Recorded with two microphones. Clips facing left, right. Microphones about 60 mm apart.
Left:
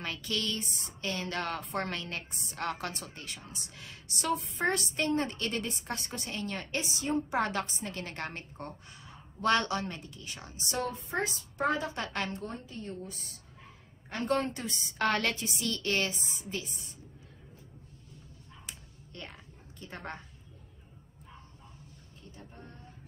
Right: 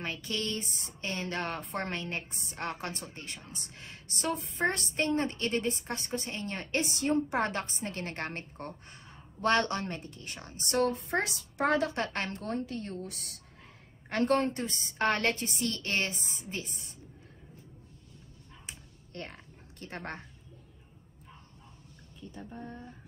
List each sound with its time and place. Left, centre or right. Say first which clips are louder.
0.0 s a woman's voice: even; right
7.2 s a woman's voice: even; right
12.3 s a woman's voice: right 5 dB; right
14.0 s a woman's voice: right 3 dB; right
14.4 s a woman's voice: right 3 dB; right
19.1 s a sound: right 3 dB; right